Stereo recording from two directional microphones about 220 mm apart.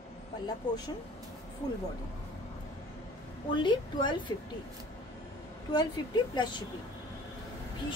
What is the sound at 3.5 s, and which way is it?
Speech, 20° left (ahead or behind).